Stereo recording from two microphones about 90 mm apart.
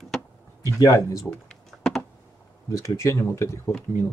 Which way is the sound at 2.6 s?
35° left (ahead or behind).